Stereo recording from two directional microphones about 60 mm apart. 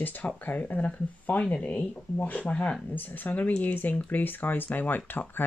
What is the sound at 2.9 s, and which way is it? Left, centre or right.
Speech, left.